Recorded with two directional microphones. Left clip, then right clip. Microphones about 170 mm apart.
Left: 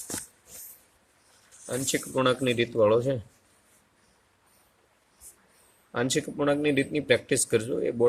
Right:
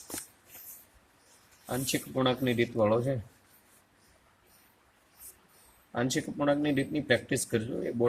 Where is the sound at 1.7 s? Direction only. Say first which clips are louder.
Left 4 dB; 60° left (ahead or behind).